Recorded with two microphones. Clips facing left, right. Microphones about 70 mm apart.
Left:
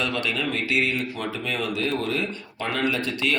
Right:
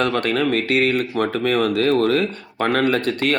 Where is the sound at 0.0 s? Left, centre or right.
Right.